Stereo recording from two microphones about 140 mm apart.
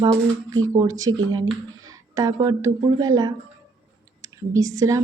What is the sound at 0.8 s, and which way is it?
A woman's voice, 25° right (ahead or behind).